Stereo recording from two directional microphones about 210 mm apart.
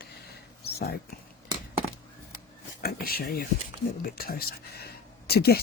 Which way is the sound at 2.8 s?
45° left (ahead or behind).